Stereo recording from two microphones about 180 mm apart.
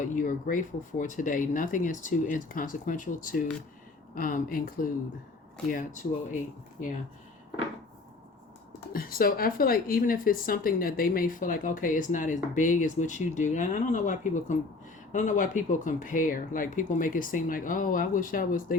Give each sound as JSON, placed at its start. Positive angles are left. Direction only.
{"t": 0.0, "sound": "speech", "side_deg": 45}
{"t": 8.9, "sound": "speech", "side_deg": 55}